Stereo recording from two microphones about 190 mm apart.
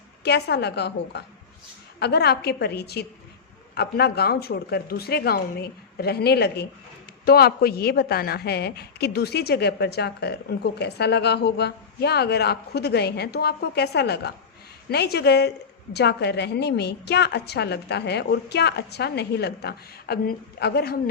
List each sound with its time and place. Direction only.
0.3 s a woman's voice: 60° left (ahead or behind)